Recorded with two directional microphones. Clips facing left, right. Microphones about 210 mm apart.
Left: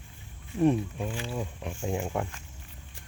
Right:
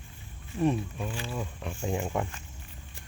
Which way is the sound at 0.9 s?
20° left (ahead or behind).